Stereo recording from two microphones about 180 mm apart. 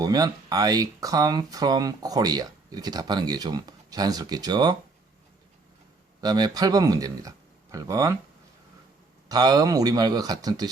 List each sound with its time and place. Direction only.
0.0 s speech: 20° right (ahead or behind)
6.2 s speech: 20° right (ahead or behind)
9.3 s speech: 20° right (ahead or behind)